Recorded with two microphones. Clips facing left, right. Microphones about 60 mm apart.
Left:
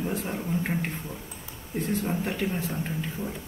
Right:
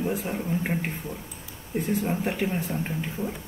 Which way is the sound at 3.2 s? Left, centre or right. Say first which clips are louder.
Right 3 dB; right.